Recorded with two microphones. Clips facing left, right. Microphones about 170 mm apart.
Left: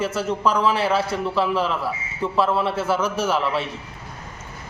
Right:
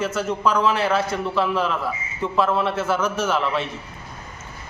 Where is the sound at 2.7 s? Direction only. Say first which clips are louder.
Even; 30° left (ahead or behind).